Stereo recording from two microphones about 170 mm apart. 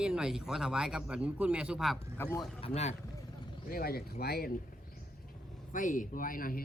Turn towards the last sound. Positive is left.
turn(degrees=55)  # may be behind; listen again after turning